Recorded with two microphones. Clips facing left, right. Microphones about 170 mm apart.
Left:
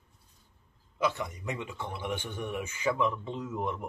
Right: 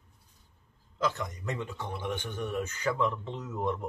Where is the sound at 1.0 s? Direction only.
10° left (ahead or behind).